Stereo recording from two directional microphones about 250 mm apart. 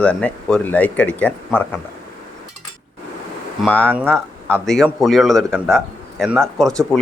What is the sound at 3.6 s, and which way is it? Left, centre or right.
Speech, centre.